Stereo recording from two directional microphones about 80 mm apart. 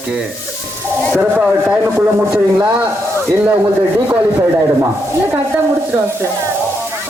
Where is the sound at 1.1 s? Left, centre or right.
Centre.